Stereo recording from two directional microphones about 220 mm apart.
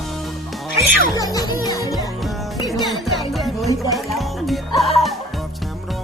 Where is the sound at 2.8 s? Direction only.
Centre (ahead or behind).